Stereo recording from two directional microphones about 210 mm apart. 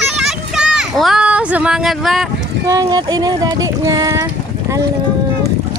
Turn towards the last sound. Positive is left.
turn(degrees=-15)  # may be behind; listen again after turning